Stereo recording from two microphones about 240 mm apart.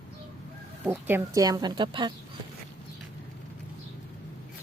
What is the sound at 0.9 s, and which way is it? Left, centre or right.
A woman's voice, centre.